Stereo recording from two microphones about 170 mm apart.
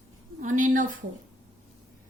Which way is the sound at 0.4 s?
50° right (ahead or behind).